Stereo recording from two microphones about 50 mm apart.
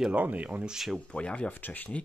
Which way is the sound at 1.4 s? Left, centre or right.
Left.